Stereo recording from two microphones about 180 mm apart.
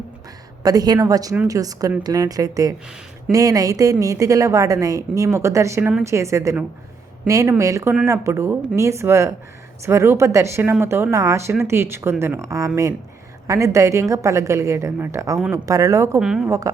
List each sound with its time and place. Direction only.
0.6 s a woman's voice: 20° right (ahead or behind)
16.2 s speech: 5° right (ahead or behind)
16.5 s a woman's voice: 20° right (ahead or behind)